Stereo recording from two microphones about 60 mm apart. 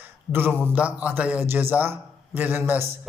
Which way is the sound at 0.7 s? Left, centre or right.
Right.